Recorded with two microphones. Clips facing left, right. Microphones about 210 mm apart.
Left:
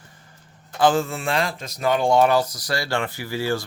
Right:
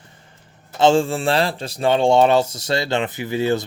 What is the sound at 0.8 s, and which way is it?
Speech, 25° right (ahead or behind).